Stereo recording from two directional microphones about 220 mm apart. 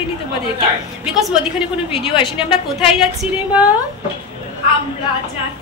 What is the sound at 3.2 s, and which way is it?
Speech, 5° right (ahead or behind).